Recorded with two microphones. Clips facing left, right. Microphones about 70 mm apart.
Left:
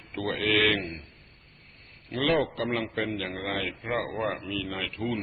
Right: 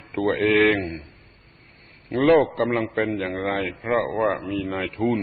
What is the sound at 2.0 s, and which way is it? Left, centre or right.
A man's voice, right.